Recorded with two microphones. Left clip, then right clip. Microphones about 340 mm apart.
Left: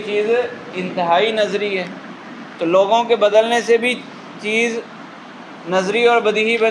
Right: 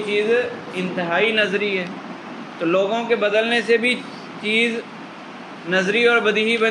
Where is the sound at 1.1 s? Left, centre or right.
Centre.